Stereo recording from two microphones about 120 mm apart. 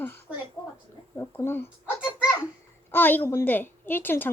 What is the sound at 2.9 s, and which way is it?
A woman's voice, 15° left (ahead or behind).